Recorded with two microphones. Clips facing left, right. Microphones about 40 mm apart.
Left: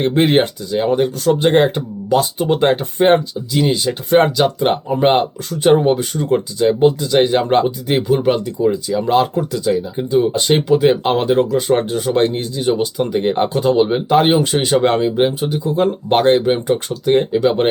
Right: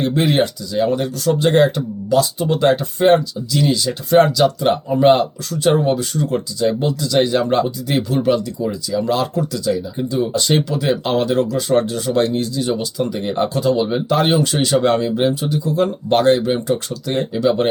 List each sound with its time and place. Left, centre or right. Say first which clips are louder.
0.0 s speech: left 3 dB; left